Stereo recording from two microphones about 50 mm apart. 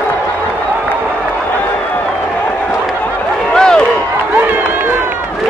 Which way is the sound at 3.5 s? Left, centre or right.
Centre.